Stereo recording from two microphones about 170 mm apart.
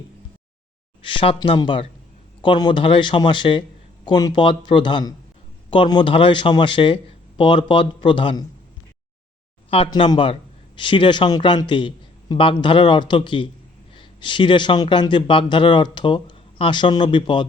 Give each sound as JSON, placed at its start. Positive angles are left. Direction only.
{"t": 1.0, "sound": "a man's voice", "side_deg": 30}
{"t": 9.6, "sound": "a man's voice", "side_deg": 30}